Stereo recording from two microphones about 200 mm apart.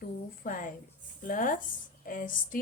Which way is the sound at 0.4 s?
40° left (ahead or behind).